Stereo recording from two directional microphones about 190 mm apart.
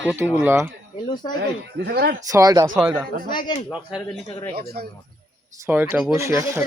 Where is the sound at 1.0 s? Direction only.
20° left (ahead or behind).